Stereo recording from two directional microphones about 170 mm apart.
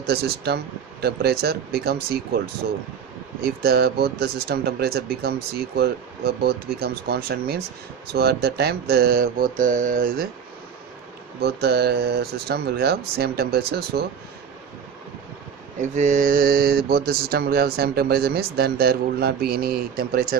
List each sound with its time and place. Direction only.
0.0 s speech: 70° right (ahead or behind)
3.4 s speech: 70° right (ahead or behind); by 10.2 s 50° right (ahead or behind)
11.4 s speech: 70° right (ahead or behind)
15.8 s speech: 45° right (ahead or behind); by 20.3 s 60° right (ahead or behind)